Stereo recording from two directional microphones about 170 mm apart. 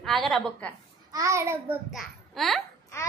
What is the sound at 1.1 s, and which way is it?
Speech, 20° right (ahead or behind).